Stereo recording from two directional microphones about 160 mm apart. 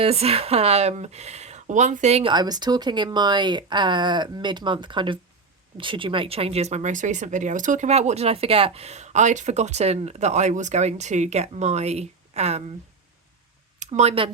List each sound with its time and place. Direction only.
0.0 s speech: 40° right (ahead or behind)
2.3 s speech: 25° right (ahead or behind); by 12.7 s 45° right (ahead or behind)
13.7 s speech: 45° right (ahead or behind)